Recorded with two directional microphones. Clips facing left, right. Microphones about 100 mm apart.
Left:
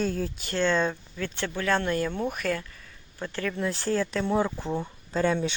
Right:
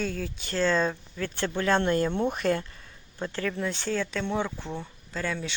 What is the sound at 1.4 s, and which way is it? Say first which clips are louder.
Speech: right 2 dB; 20° right (ahead or behind).